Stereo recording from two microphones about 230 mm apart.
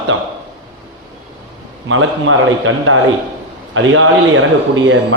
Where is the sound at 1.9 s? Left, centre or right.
Right.